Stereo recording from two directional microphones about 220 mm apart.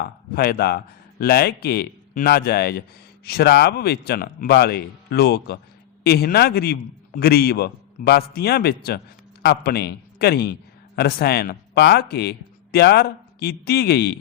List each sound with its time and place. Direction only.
0.0 s speech: 45° left (ahead or behind)